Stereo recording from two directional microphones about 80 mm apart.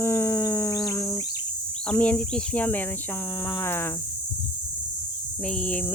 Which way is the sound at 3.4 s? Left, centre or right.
Left.